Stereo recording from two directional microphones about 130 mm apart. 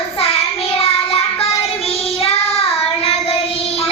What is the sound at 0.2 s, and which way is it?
Child singing, 50° left (ahead or behind).